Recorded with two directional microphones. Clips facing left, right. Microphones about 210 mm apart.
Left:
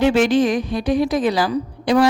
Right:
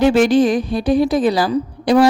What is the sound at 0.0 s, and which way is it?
A woman's voice, 40° right (ahead or behind).